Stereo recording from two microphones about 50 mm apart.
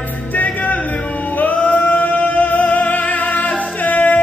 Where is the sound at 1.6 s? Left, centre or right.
Left.